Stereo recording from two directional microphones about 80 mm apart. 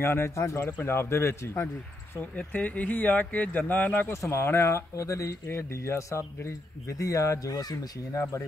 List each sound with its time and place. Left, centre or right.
0.0 s speech: left
2.3 s speech: centre
4.1 s speech: left